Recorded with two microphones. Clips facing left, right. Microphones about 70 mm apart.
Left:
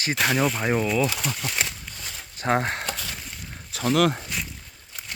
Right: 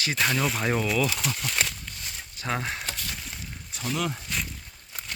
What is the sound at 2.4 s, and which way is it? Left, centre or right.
Speech, left.